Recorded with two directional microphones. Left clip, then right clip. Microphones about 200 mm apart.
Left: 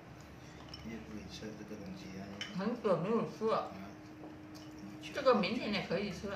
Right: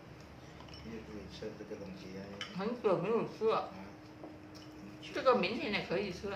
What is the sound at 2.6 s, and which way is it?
A woman's voice, 20° right (ahead or behind).